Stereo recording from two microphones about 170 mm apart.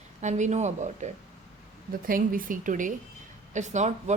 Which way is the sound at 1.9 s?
55° right (ahead or behind).